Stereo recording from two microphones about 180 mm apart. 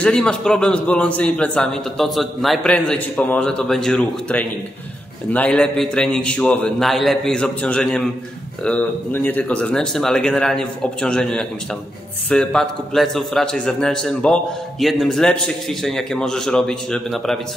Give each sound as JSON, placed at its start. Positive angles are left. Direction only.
{"t": 0.0, "sound": "a man's voice", "side_deg": 5}